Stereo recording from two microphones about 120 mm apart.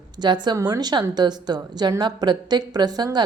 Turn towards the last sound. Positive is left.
turn(degrees=-35)  # may be behind; listen again after turning